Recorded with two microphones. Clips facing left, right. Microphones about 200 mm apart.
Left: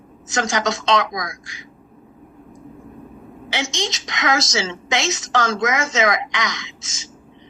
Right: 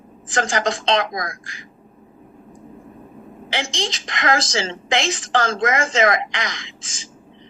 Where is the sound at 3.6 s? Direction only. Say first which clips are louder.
Left 2 dB; 30° right (ahead or behind).